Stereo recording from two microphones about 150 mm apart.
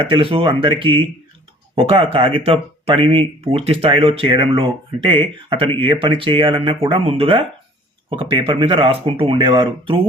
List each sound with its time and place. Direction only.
0.0 s speech: 35° right (ahead or behind)